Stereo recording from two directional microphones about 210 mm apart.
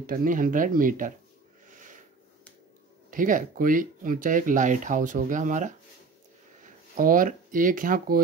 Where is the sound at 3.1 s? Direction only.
40° right (ahead or behind).